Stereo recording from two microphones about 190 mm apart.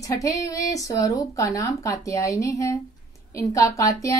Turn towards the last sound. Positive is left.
turn(degrees=15)  # may be behind; listen again after turning